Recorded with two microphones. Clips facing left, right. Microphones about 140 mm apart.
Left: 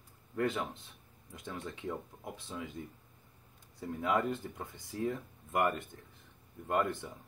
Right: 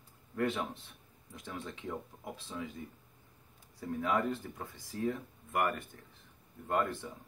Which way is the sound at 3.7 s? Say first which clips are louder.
Even; 20° left (ahead or behind).